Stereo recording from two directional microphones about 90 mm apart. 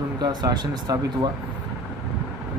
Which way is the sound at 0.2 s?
50° right (ahead or behind).